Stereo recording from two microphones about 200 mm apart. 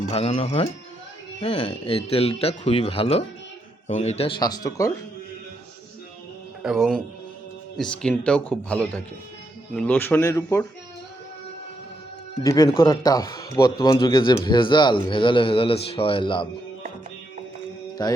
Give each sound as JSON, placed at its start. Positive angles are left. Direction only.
{"t": 0.1, "sound": "a man's voice", "side_deg": 30}
{"t": 6.6, "sound": "a man's voice", "side_deg": 0}
{"t": 12.4, "sound": "a man's voice", "side_deg": 15}
{"t": 18.0, "sound": "a man's voice", "side_deg": 20}